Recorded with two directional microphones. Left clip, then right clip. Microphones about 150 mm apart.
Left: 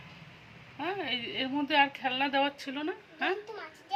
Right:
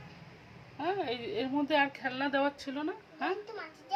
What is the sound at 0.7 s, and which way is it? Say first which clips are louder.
A woman's voice: even; 25° left (ahead or behind).